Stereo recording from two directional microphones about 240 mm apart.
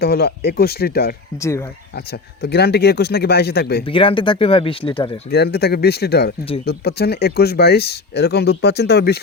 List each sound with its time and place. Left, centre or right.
0.0 s speech: left
1.4 s speech: centre
2.4 s speech: left
3.8 s speech: left
5.3 s speech: left